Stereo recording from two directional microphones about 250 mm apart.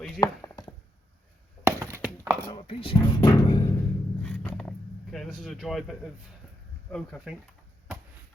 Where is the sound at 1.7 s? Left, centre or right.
Centre.